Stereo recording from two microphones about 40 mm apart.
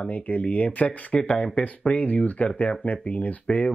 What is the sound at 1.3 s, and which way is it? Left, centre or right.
Speech, left.